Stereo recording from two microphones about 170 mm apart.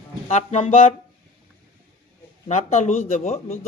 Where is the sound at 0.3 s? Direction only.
40° left (ahead or behind).